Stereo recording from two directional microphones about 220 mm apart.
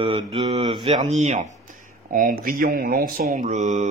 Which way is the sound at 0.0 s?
25° right (ahead or behind).